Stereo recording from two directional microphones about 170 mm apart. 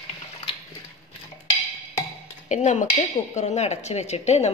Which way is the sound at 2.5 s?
45° left (ahead or behind).